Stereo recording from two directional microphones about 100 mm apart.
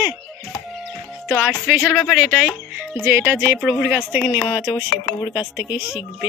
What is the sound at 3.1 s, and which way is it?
Speech, 25° right (ahead or behind).